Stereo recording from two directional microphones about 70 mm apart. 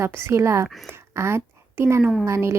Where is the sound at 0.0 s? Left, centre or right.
Right.